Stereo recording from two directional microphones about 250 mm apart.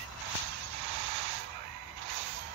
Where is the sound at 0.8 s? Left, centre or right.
Right.